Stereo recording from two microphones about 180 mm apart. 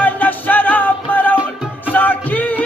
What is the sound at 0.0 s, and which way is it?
Music, 10° left (ahead or behind).